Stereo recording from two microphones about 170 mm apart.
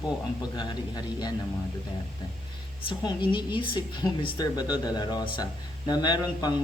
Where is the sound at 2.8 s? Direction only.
30° left (ahead or behind).